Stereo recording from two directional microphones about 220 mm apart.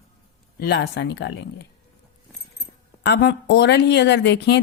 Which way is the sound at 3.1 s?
50° left (ahead or behind).